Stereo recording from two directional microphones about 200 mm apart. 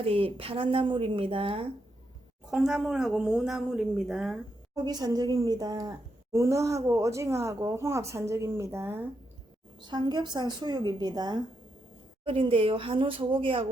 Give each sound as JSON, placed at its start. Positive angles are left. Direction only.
{"t": 0.0, "sound": "a woman's voice", "side_deg": -30}
{"t": 2.5, "sound": "speech", "side_deg": 0}
{"t": 4.7, "sound": "a woman's voice", "side_deg": -20}